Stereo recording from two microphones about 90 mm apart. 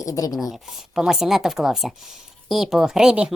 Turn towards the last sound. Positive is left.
turn(degrees=-10)  # may be behind; listen again after turning